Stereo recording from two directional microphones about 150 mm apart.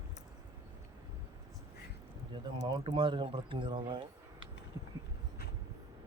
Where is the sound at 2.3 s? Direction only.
30° right (ahead or behind).